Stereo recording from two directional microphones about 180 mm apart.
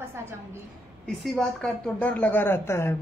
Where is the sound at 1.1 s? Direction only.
5° left (ahead or behind).